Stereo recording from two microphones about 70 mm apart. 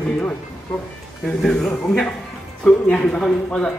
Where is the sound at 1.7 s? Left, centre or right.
Left.